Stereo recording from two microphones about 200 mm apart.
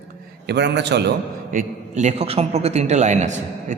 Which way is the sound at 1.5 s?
35° right (ahead or behind).